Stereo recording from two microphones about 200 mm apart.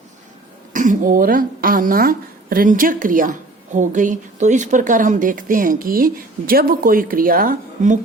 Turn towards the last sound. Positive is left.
turn(degrees=-40)  # may be behind; listen again after turning